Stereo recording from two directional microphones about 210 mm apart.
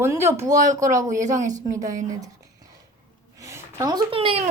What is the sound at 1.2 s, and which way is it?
Speech, 35° right (ahead or behind).